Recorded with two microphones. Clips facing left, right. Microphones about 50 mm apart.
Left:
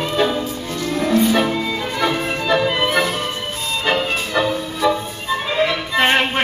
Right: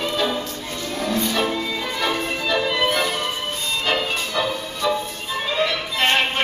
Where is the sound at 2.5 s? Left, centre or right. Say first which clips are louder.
Left 4 dB; left.